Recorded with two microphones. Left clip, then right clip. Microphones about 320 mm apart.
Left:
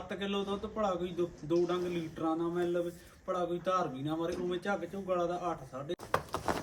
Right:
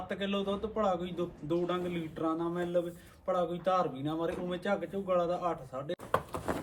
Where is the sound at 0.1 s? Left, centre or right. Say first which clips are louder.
Right 1 dB; centre.